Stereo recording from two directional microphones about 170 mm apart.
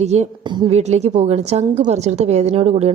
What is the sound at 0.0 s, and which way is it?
A woman's voice, 40° right (ahead or behind).